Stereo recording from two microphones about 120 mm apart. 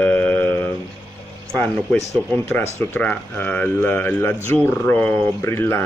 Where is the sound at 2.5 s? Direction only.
20° left (ahead or behind).